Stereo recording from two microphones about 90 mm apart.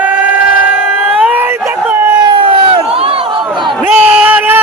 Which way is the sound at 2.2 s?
65° right (ahead or behind).